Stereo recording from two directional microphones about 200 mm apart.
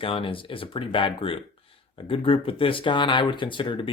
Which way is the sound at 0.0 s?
25° left (ahead or behind).